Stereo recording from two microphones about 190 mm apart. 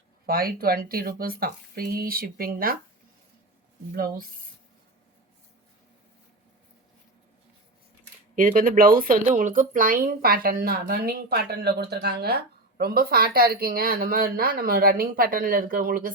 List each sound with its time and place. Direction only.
0.3 s a woman's voice: 50° right (ahead or behind)
3.9 s a woman's voice: 50° right (ahead or behind)
8.4 s a woman's voice: 45° right (ahead or behind)